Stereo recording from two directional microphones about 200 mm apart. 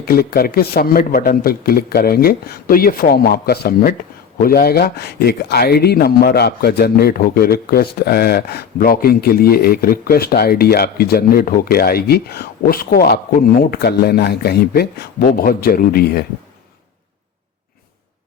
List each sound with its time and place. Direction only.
0.0 s speech: 50° left (ahead or behind)